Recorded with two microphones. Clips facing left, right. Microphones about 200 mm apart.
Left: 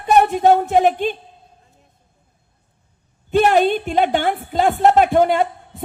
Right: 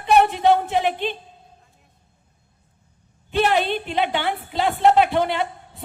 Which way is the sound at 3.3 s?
45° left (ahead or behind).